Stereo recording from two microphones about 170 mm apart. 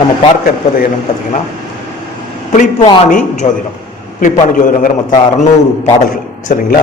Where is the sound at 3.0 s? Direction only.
45° left (ahead or behind).